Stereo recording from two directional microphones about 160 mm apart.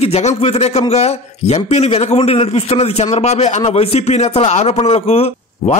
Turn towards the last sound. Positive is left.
turn(degrees=40)  # may be behind; listen again after turning